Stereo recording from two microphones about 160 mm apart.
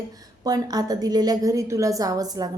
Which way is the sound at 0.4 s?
25° right (ahead or behind).